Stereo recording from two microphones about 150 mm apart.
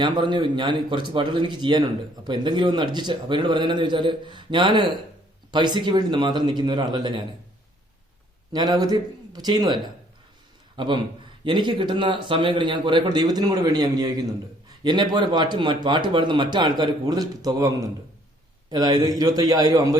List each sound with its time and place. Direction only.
0.0 s a man's voice: 30° right (ahead or behind)
8.5 s a man's voice: 25° right (ahead or behind)